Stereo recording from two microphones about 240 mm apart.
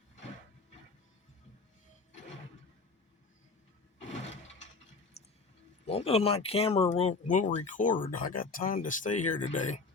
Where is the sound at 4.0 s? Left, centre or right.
Left.